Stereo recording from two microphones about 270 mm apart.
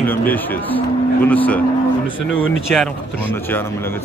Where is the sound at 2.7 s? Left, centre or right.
Centre.